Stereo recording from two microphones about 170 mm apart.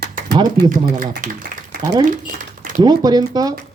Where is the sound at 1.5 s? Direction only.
50° right (ahead or behind).